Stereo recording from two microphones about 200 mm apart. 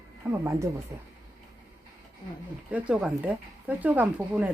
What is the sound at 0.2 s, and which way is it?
Speech, 10° right (ahead or behind).